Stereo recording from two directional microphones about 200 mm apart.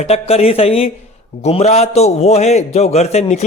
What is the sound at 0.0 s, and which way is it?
A man's voice, 30° left (ahead or behind).